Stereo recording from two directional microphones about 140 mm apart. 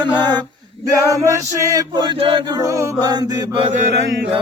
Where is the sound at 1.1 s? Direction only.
25° right (ahead or behind).